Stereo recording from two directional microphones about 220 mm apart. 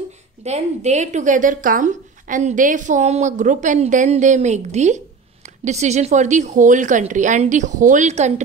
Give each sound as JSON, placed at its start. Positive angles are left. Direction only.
{"t": 0.4, "sound": "speech", "side_deg": -30}